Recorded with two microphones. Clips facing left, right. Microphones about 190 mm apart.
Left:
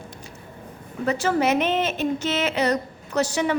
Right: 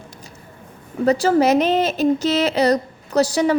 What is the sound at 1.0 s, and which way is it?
A woman's voice, 35° right (ahead or behind).